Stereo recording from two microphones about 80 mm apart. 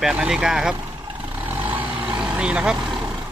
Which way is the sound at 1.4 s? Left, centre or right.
Right.